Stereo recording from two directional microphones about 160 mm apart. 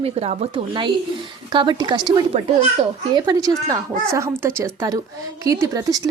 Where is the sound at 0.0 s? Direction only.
40° right (ahead or behind).